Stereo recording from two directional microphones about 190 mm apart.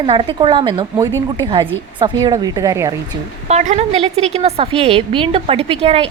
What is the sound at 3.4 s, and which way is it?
A woman's voice, 35° right (ahead or behind).